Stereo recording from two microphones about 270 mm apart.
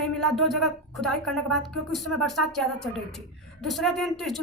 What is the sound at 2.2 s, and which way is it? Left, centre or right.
Speech, centre.